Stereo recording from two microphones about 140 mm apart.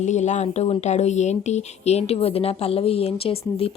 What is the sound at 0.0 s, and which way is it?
Speech, 55° left (ahead or behind).